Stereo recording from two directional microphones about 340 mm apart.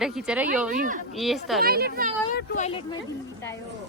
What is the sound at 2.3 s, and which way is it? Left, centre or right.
Speech, centre.